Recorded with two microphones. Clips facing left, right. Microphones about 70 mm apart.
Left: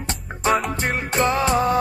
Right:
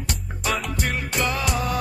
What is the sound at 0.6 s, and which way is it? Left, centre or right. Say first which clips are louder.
Music: left 3 dB; left.